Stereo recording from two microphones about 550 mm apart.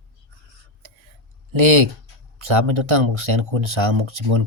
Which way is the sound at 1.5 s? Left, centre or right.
Right.